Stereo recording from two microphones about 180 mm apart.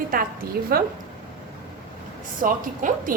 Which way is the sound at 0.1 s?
55° right (ahead or behind).